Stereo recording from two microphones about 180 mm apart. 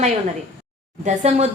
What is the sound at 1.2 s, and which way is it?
Speech, 35° right (ahead or behind).